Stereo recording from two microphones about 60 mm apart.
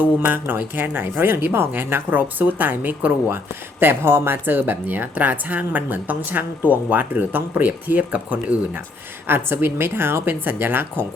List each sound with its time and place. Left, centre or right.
0.3 s a woman's voice: right
9.2 s a woman's voice: right